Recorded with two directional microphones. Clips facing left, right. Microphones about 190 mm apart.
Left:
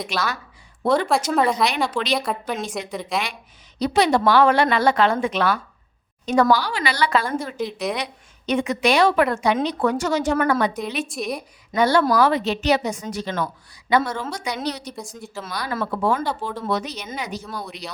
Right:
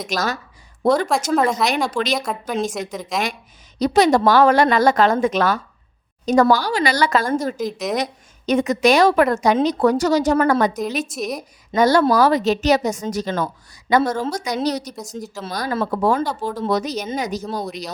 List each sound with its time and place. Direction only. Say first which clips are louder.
0.1 s a woman's voice: right 3 dB; 40° right (ahead or behind)
1.3 s a woman's voice: right 3 dB; centre (ahead or behind)
1.6 s a woman's voice: right 2 dB; 45° right (ahead or behind)
2.1 s a woman's voice: right 2 dB; 5° left (ahead or behind)
3.8 s a woman's voice: right 4 dB; 45° right (ahead or behind)
7.7 s a woman's voice: right 1 dB; centre (ahead or behind)
7.9 s a woman's voice: right 6 dB; 40° right (ahead or behind)
11.1 s a woman's voice: right 1 dB; centre (ahead or behind)
11.3 s a woman's voice: right 3 dB; 40° right (ahead or behind)
15.1 s a woman's voice: right 6 dB; 30° right (ahead or behind)